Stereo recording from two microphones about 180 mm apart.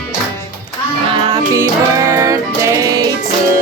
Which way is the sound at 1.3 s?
15° right (ahead or behind).